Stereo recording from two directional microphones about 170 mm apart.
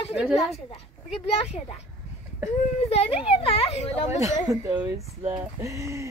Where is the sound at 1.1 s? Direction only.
35° left (ahead or behind).